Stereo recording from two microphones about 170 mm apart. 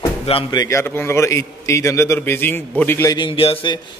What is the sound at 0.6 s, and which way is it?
A man's voice, 15° left (ahead or behind).